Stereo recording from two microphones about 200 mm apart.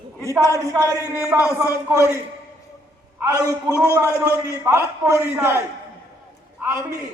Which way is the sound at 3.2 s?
15° right (ahead or behind).